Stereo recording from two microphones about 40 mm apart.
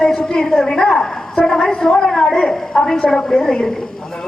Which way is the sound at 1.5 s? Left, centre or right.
Centre.